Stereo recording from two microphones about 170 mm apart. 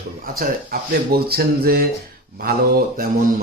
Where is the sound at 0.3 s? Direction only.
60° right (ahead or behind).